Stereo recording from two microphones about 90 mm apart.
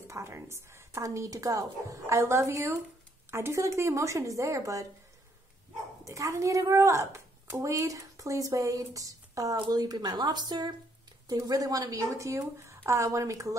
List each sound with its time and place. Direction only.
0.1 s a woman's voice: 30° right (ahead or behind)
6.0 s a woman's voice: 35° right (ahead or behind)